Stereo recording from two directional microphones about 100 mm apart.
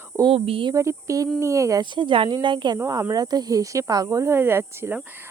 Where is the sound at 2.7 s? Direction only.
30° right (ahead or behind).